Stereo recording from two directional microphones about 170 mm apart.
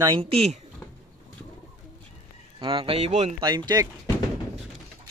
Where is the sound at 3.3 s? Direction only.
25° right (ahead or behind).